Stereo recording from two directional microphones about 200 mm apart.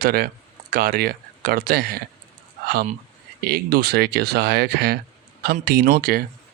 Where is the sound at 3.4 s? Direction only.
50° right (ahead or behind).